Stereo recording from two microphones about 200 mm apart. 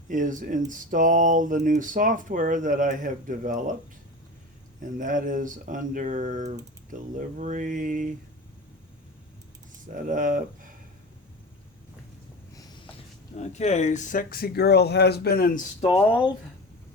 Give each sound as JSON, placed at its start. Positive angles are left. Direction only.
{"t": 0.1, "sound": "speech", "side_deg": -40}
{"t": 4.8, "sound": "speech", "side_deg": -40}
{"t": 9.9, "sound": "speech", "side_deg": -40}
{"t": 13.3, "sound": "speech", "side_deg": 35}